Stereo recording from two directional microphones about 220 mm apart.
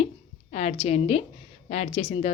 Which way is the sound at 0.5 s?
30° left (ahead or behind).